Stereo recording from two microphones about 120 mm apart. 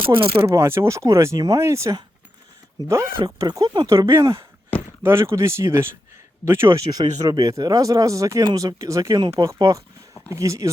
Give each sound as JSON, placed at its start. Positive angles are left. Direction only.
{"t": 0.1, "sound": "speech", "side_deg": -50}
{"t": 0.4, "sound": "speech", "side_deg": -20}